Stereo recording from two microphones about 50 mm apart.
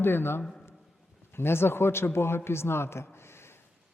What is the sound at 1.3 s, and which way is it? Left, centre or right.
A man's voice, left.